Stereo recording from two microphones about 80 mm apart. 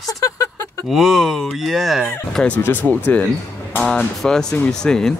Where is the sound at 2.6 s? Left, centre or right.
Left.